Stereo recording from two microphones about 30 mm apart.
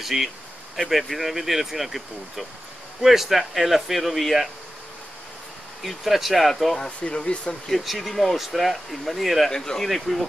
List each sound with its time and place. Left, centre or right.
0.0 s speech: centre
3.0 s speech: centre
5.8 s speech: centre
7.0 s speech: left
7.8 s speech: centre
9.5 s speech: left
9.8 s speech: centre